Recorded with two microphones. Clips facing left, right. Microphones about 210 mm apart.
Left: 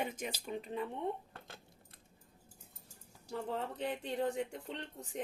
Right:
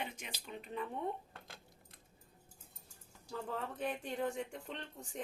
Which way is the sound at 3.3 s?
25° left (ahead or behind).